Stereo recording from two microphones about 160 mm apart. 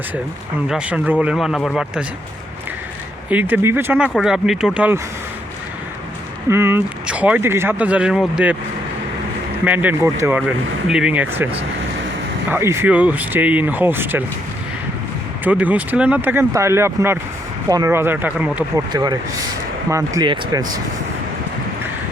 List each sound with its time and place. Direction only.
0.7 s speech: 5° right (ahead or behind)
3.2 s speech: 10° right (ahead or behind)
6.5 s speech: 15° right (ahead or behind)
9.6 s speech: 10° right (ahead or behind)
12.5 s speech: 15° right (ahead or behind)
15.4 s speech: 10° right (ahead or behind)
18.9 s speech: 25° right (ahead or behind)